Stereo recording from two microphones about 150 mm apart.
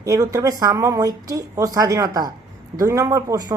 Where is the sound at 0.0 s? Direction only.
20° right (ahead or behind).